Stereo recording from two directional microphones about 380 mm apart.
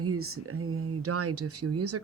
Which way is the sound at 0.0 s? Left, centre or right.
Right.